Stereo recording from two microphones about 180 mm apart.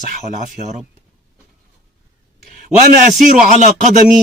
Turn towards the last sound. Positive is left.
turn(degrees=-45)  # may be behind; listen again after turning